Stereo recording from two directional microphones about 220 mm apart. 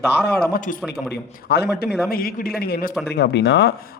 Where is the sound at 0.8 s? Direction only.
Centre (ahead or behind).